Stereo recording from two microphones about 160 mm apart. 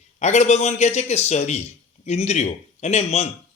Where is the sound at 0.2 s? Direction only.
45° left (ahead or behind).